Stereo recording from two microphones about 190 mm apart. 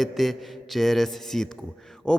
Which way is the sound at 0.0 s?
Centre (ahead or behind).